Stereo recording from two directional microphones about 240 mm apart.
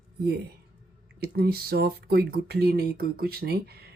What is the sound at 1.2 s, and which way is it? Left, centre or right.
Speech, right.